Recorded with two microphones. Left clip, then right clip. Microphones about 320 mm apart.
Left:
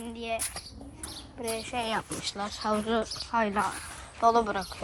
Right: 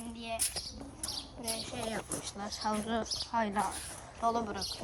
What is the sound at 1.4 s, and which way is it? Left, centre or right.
A woman's voice, centre.